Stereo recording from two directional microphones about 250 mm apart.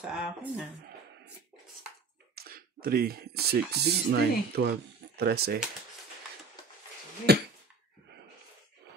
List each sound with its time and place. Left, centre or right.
0.0 s speech: centre
2.3 s speech: right
7.3 s a sound: right